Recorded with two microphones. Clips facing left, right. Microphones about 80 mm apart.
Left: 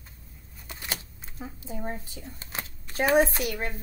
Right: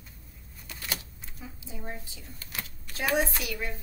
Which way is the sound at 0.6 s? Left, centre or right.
Left.